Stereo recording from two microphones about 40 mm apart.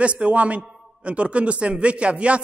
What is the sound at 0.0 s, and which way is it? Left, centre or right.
A man's voice, right.